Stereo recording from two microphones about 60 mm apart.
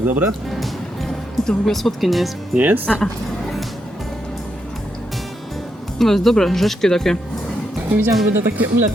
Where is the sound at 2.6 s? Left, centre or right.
Right.